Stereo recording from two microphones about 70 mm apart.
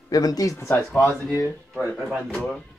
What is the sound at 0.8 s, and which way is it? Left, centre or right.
Speech, centre.